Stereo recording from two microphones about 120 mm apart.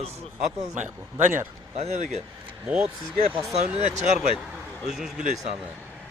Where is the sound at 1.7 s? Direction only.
60° right (ahead or behind).